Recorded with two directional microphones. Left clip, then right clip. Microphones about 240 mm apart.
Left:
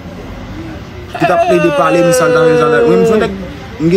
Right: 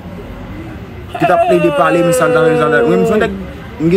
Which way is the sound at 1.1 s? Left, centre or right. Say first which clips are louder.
Even; centre.